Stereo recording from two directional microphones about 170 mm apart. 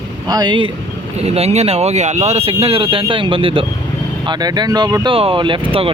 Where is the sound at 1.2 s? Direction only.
35° right (ahead or behind).